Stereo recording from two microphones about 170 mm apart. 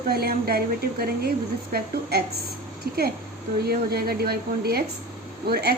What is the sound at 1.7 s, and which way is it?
Speech, 65° right (ahead or behind).